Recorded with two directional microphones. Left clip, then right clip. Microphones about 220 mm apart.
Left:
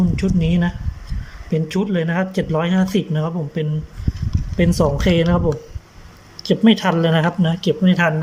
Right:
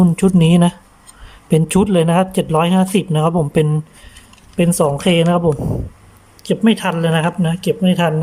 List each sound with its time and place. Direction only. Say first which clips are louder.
0.2 s speech: right 7 dB; 20° right (ahead or behind)
4.5 s speech: right 3 dB; 10° right (ahead or behind)